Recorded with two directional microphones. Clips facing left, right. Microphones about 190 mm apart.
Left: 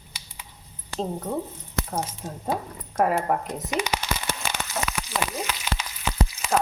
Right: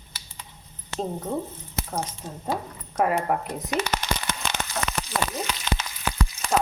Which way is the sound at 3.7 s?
10° left (ahead or behind).